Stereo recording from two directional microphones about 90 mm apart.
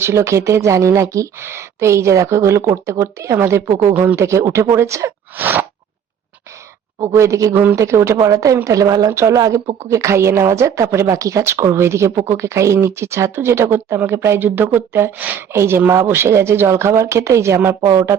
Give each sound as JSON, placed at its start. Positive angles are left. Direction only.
{"t": 0.0, "sound": "a woman's voice", "side_deg": -30}
{"t": 5.4, "sound": "speech", "side_deg": -20}
{"t": 7.0, "sound": "a woman's voice", "side_deg": -30}
{"t": 7.5, "sound": "speech", "side_deg": -20}
{"t": 7.8, "sound": "a woman's voice", "side_deg": -30}